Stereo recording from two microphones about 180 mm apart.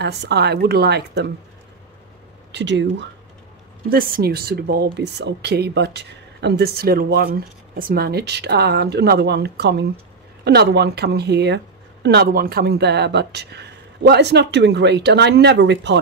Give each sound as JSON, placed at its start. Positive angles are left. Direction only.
{"t": 0.0, "sound": "speech", "side_deg": -65}
{"t": 2.5, "sound": "speech", "side_deg": -75}
{"t": 3.9, "sound": "speech", "side_deg": -55}